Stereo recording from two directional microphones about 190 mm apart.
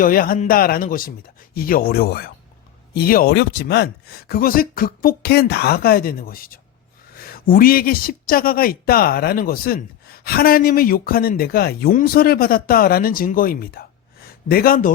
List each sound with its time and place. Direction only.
0.0 s a man's voice: 50° left (ahead or behind)